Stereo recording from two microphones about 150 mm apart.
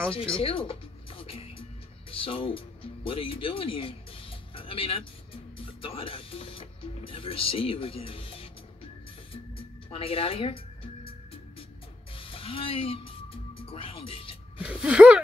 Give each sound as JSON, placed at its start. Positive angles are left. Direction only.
{"t": 0.1, "sound": "speech", "side_deg": 35}
{"t": 9.8, "sound": "speech", "side_deg": 40}
{"t": 12.2, "sound": "music", "side_deg": 35}
{"t": 13.7, "sound": "speech", "side_deg": 40}
{"t": 14.6, "sound": "speech", "side_deg": -5}